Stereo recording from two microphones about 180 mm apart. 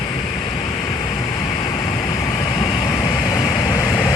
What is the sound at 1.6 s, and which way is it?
Vehicle, 25° left (ahead or behind).